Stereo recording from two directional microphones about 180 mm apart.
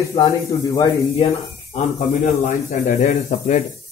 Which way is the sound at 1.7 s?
45° left (ahead or behind).